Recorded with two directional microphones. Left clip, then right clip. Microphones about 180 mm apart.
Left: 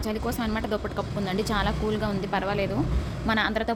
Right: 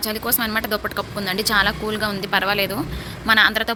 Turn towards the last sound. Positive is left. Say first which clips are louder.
# right 9 dB
turn(degrees=10)  # may be behind; listen again after turning